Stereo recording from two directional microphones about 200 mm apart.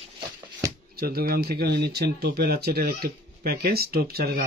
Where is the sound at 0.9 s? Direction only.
50° right (ahead or behind).